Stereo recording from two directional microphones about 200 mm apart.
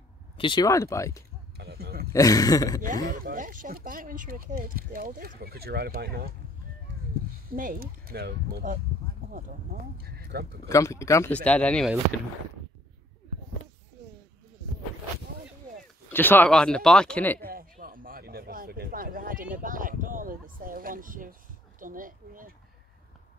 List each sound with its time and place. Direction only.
0.4 s speech: 20° left (ahead or behind)
1.6 s a sound: 50° right (ahead or behind)
2.1 s speech: 15° left (ahead or behind)
3.1 s speech: 40° right (ahead or behind)
7.5 s speech: 45° right (ahead or behind)
10.0 s a sound: 50° right (ahead or behind)
10.7 s speech: 15° left (ahead or behind)
16.1 s speech: 10° left (ahead or behind)
17.4 s a sound: 45° right (ahead or behind)